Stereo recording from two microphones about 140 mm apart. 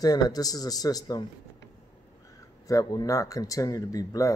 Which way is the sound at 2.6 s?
25° left (ahead or behind).